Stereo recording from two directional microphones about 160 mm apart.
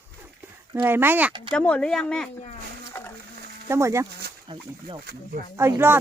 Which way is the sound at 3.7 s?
20° right (ahead or behind).